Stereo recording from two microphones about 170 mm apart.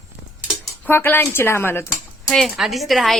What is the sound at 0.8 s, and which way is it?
Speech, 10° left (ahead or behind).